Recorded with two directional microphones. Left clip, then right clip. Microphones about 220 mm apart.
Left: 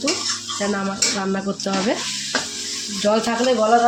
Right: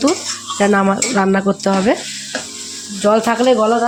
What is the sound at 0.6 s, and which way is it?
Speech, 40° right (ahead or behind).